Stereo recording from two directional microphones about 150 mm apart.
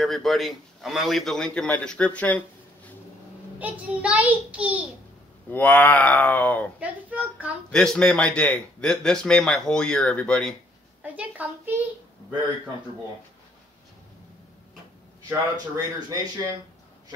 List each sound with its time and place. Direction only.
0.0 s a man's voice: centre (ahead or behind)
3.5 s a child's voice: 10° right (ahead or behind)
5.5 s speech: 10° left (ahead or behind)
6.8 s a child's voice: 10° right (ahead or behind)
7.7 s a man's voice: 5° left (ahead or behind)
11.0 s a child's voice: 10° right (ahead or behind)
15.5 s speech: 25° right (ahead or behind)